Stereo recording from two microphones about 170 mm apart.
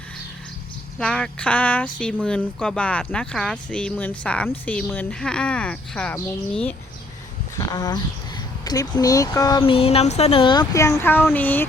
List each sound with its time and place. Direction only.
0.9 s speech: 5° left (ahead or behind)
7.6 s speech: 25° left (ahead or behind)